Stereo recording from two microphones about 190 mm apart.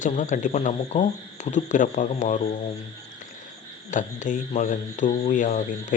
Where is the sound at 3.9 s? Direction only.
40° left (ahead or behind).